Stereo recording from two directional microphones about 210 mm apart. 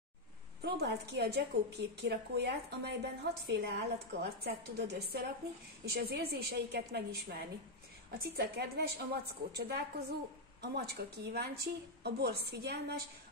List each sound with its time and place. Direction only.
0.6 s a woman's voice: 50° right (ahead or behind)